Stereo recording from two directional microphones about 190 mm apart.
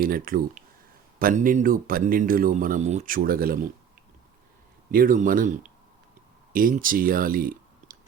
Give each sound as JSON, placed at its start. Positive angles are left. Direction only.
{"t": 0.0, "sound": "speech", "side_deg": -50}
{"t": 4.9, "sound": "speech", "side_deg": -50}